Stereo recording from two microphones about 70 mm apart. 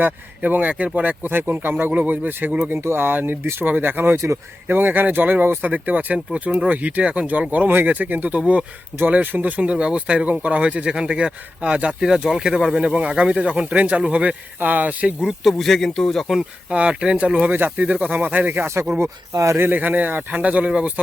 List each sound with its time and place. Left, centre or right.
0.0 s speech: right
15.4 s speech: centre
16.6 s speech: centre; by 18.9 s right
19.3 s speech: right
19.5 s speech: right